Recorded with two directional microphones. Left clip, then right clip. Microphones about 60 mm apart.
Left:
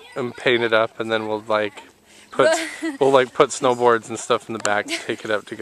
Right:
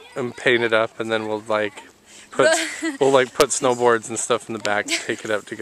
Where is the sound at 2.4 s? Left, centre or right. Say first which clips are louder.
Even; centre.